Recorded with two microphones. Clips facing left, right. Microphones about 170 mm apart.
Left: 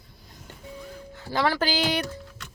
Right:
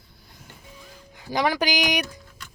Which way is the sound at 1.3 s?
15° right (ahead or behind).